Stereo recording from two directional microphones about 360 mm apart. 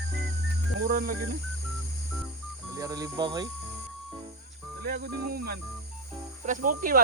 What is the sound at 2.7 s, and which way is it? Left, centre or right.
Speech, centre.